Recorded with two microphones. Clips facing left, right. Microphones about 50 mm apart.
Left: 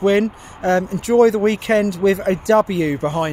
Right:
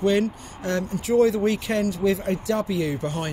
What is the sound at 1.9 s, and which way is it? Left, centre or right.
Speech, left.